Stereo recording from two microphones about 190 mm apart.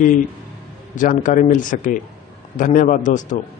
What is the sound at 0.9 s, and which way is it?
Speech, 45° left (ahead or behind).